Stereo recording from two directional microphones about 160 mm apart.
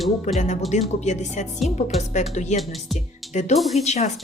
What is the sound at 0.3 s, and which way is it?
Speech, 45° left (ahead or behind).